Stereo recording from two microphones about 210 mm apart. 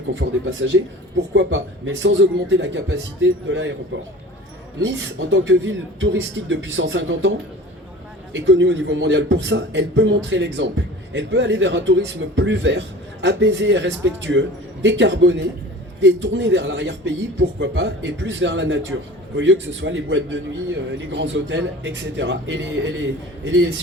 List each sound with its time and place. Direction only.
0.1 s a man's voice: 60° right (ahead or behind)
4.8 s a man's voice: 60° right (ahead or behind)